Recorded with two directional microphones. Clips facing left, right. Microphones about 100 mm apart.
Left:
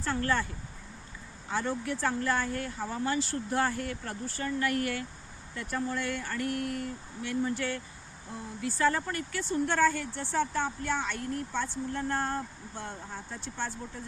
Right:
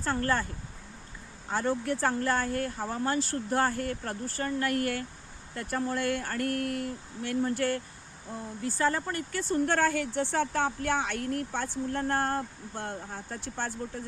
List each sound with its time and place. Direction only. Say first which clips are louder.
0.0 s speech: right 1 dB; 40° right (ahead or behind)
1.5 s speech: right 3 dB; 40° right (ahead or behind)
8.6 s speech: even; 30° right (ahead or behind)
9.5 s a woman's voice: even; 55° right (ahead or behind)